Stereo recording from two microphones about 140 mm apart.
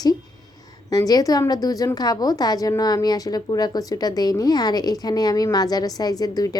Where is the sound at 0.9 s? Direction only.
25° left (ahead or behind).